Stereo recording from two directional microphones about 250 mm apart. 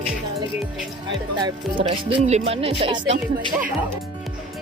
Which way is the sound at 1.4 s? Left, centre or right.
Centre.